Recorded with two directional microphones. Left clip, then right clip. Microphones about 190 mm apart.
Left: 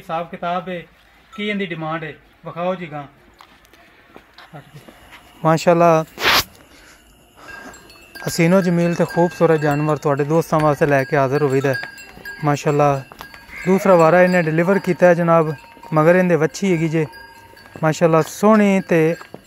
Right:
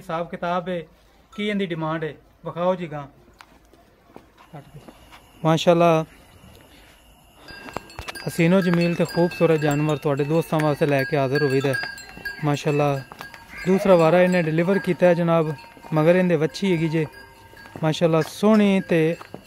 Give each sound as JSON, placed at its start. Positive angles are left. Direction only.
{"t": 0.0, "sound": "a man's voice", "side_deg": -20}
{"t": 5.4, "sound": "speech", "side_deg": 10}
{"t": 5.8, "sound": "wind chime", "side_deg": -5}
{"t": 8.2, "sound": "speech", "side_deg": 10}
{"t": 9.2, "sound": "wind chime", "side_deg": 5}
{"t": 9.8, "sound": "speech", "side_deg": 5}